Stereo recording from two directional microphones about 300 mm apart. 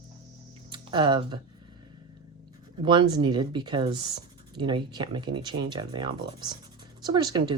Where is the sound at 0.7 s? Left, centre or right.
Centre.